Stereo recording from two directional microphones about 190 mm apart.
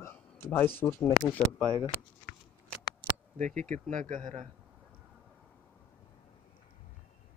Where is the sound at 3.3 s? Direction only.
40° right (ahead or behind).